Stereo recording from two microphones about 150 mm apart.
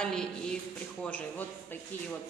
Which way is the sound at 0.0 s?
5° left (ahead or behind).